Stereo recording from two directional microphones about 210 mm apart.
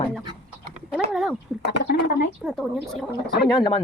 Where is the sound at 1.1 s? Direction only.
Centre (ahead or behind).